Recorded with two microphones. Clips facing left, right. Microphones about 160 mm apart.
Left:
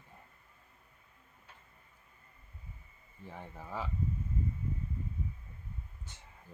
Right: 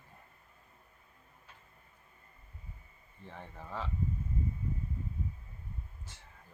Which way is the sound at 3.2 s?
10° left (ahead or behind).